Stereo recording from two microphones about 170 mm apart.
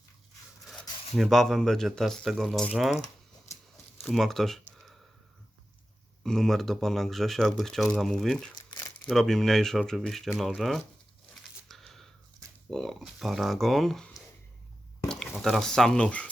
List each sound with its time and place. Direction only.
0.7 s speech: centre (ahead or behind)
4.0 s a sound: centre (ahead or behind)
6.2 s speech: centre (ahead or behind)
8.5 s crumpling: 25° left (ahead or behind)
9.0 s speech: centre (ahead or behind)
11.7 s a sound: centre (ahead or behind)
12.7 s speech: centre (ahead or behind)